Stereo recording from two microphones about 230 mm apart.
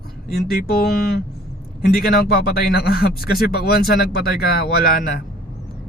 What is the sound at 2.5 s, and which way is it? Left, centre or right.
Speech, left.